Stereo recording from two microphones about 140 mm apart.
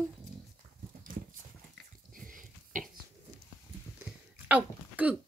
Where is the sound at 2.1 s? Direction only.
75° right (ahead or behind).